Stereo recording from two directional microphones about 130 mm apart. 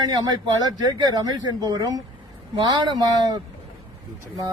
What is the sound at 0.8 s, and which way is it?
A man's voice, 30° right (ahead or behind).